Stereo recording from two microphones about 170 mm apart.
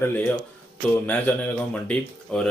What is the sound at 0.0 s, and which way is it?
Speech, 10° left (ahead or behind).